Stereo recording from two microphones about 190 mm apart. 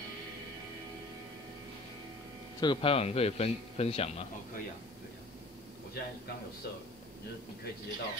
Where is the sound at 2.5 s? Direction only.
25° left (ahead or behind).